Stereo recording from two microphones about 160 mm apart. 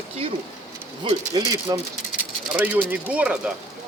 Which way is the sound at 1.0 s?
30° right (ahead or behind).